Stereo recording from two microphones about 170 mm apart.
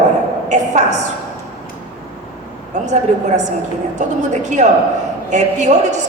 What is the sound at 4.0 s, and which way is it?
A woman's voice, 45° right (ahead or behind).